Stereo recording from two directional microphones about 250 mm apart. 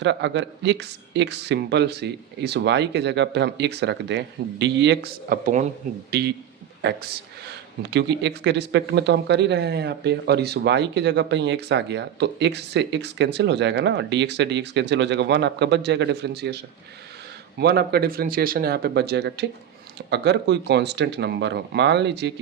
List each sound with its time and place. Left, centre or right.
0.0 s speech: right
7.8 s speech: right
17.6 s speech: right